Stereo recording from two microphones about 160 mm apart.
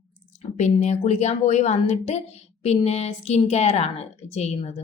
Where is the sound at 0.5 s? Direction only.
45° left (ahead or behind).